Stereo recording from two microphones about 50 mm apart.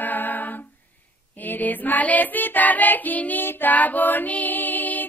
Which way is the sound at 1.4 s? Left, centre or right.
Left.